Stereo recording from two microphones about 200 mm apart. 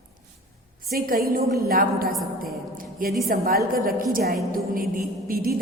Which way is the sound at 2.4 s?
45° right (ahead or behind).